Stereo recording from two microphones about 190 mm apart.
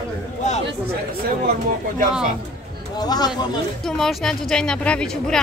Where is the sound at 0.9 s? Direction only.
50° right (ahead or behind).